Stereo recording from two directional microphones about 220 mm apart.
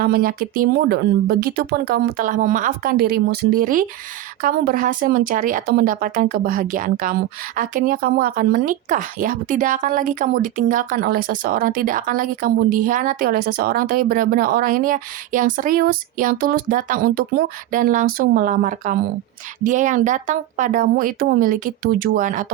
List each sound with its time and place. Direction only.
0.0 s speech: 45° right (ahead or behind)